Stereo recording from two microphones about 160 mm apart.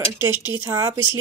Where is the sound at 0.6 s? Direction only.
20° right (ahead or behind).